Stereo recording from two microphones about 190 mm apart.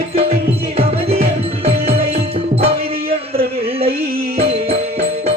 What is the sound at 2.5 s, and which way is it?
Music, 30° right (ahead or behind).